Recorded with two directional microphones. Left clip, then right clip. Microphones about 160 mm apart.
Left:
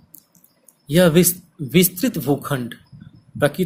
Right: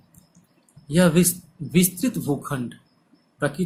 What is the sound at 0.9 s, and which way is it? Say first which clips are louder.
Speech: left 5 dB; 50° left (ahead or behind).